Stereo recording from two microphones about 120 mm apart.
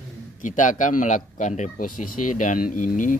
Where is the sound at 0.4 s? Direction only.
90° left.